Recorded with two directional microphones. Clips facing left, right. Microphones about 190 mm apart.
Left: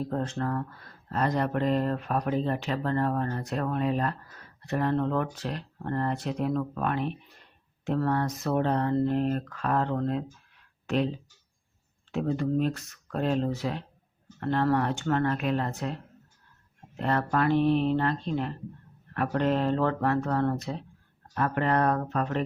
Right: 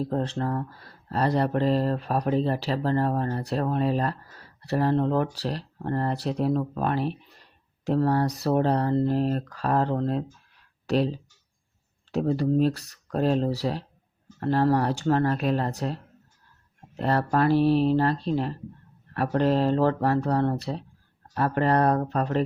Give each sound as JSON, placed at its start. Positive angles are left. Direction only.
{"t": 0.0, "sound": "speech", "side_deg": -30}
{"t": 12.1, "sound": "speech", "side_deg": -35}
{"t": 17.0, "sound": "speech", "side_deg": -35}